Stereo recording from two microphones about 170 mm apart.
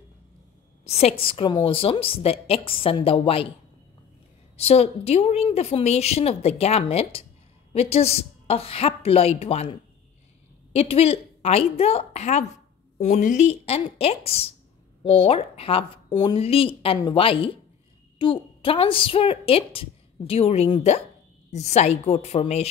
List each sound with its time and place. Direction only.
0.8 s a woman's voice: 40° left (ahead or behind)
4.6 s a woman's voice: 35° left (ahead or behind)